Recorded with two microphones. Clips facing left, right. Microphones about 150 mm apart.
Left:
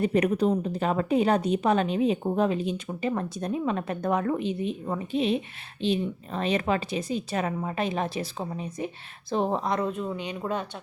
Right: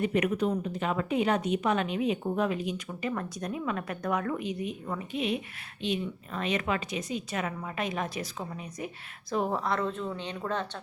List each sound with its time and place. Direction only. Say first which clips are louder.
0.0 s a woman's voice: left 4 dB; 35° left (ahead or behind); by 10.7 s 10° left (ahead or behind)